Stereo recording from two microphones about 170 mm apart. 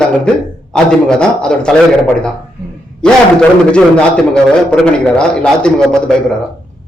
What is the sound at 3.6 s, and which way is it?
A man's voice, 5° left (ahead or behind).